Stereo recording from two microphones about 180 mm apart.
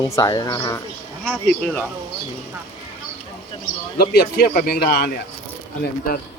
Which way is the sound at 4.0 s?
60° left (ahead or behind).